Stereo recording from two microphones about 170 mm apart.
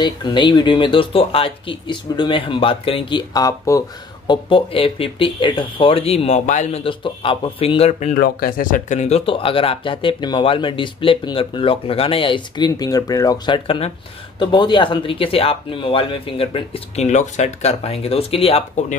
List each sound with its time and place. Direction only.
0.0 s speech: 25° left (ahead or behind)
4.3 s speech: 30° left (ahead or behind)
8.1 s speech: 60° left (ahead or behind); by 13.6 s 20° left (ahead or behind)
13.7 s speech: 35° left (ahead or behind)